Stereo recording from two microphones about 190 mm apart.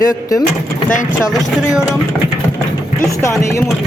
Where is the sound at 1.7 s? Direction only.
5° right (ahead or behind).